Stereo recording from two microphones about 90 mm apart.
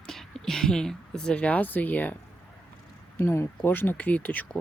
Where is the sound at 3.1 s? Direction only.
30° left (ahead or behind).